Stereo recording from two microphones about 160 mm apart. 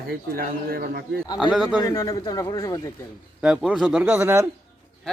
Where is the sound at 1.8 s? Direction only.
20° left (ahead or behind).